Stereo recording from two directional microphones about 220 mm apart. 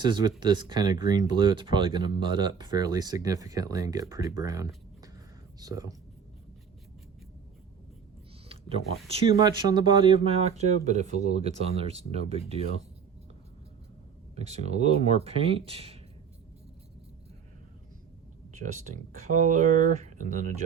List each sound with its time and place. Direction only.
0.0 s speech: 20° right (ahead or behind)
9.0 s speech: 25° right (ahead or behind)
14.3 s speech: 30° right (ahead or behind)
18.6 s speech: 35° right (ahead or behind)